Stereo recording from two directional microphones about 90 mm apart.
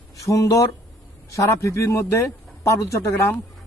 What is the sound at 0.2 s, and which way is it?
A man's voice, 40° left (ahead or behind).